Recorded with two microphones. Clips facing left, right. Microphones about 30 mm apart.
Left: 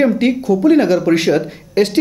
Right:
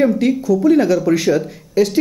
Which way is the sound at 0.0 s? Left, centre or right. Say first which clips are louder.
Left 1 dB; left.